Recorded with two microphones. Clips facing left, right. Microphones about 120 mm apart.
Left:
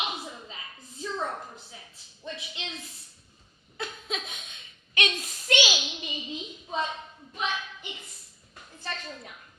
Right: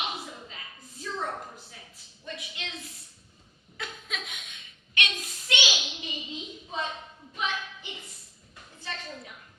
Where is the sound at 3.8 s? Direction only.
30° left (ahead or behind).